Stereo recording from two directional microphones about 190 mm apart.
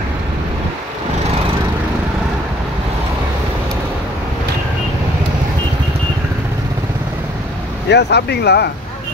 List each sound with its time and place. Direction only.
7.9 s speech: 60° left (ahead or behind)